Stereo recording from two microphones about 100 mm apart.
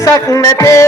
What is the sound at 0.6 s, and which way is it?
Music, 30° left (ahead or behind).